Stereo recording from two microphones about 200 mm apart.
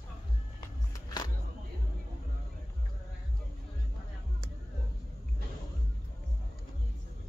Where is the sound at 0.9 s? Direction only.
20° left (ahead or behind).